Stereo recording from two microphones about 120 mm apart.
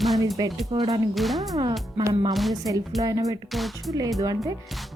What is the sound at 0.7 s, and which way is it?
Speech, 45° right (ahead or behind).